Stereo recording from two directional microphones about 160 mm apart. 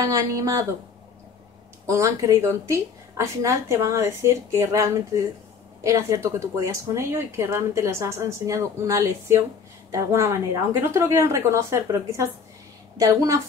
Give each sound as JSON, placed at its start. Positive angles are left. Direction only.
{"t": 0.0, "sound": "speech", "side_deg": -20}
{"t": 1.9, "sound": "a woman's voice", "side_deg": -20}